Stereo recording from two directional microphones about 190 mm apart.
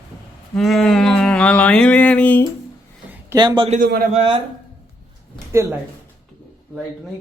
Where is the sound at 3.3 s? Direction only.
25° right (ahead or behind).